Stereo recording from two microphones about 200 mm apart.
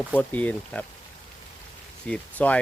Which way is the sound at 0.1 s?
5° left (ahead or behind).